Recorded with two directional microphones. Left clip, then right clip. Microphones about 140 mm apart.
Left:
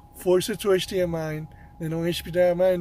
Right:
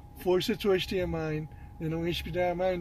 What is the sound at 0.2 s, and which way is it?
Speech, 25° left (ahead or behind).